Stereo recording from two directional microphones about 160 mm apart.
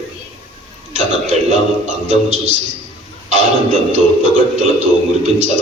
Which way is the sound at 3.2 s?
45° right (ahead or behind).